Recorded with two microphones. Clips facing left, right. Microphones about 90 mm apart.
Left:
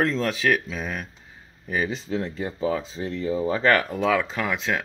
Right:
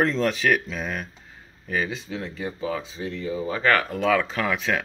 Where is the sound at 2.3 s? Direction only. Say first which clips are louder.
Even; 30° left (ahead or behind).